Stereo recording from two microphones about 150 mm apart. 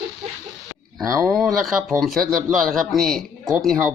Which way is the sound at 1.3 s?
Centre (ahead or behind).